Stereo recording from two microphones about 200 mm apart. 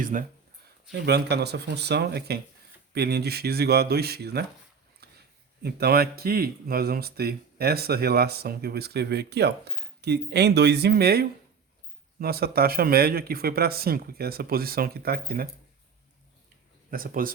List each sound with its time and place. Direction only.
0.0 s speech: 40° right (ahead or behind)
1.0 s speech: 55° right (ahead or behind)
5.0 s a sound: 55° right (ahead or behind)
5.6 s speech: 50° right (ahead or behind)
16.9 s speech: 45° right (ahead or behind)